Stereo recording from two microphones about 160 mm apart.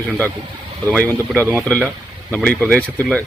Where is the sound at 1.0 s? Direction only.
10° left (ahead or behind).